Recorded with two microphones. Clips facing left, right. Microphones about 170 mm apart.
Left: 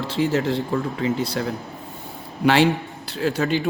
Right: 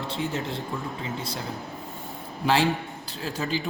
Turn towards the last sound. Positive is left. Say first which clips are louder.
# left 8 dB
turn(degrees=65)  # may be behind; listen again after turning